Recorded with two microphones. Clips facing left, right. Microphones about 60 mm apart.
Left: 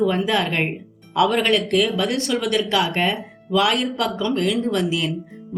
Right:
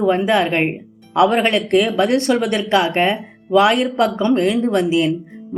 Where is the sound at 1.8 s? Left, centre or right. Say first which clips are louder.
Right 6 dB; right.